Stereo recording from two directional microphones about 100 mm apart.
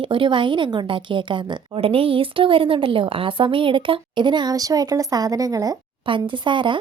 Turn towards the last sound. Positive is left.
turn(degrees=-55)  # may be behind; listen again after turning